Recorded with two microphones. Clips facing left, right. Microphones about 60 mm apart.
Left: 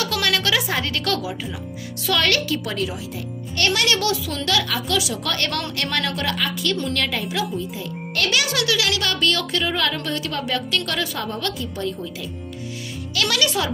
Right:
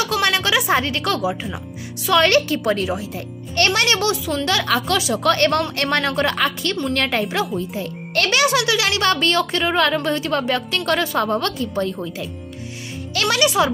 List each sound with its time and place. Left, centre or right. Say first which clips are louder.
0.0 s music: right 3 dB; right
0.7 s a woman's voice: right 4 dB; right
4.6 s a woman's voice: right 4 dB; right
8.5 s a woman's voice: right 3 dB; right